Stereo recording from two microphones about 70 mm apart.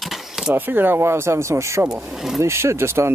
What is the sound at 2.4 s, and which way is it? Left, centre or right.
Speech, right.